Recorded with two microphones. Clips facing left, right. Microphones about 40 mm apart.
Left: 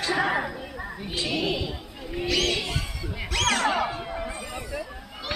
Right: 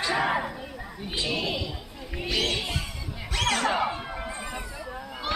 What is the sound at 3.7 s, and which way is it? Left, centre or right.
Music, centre.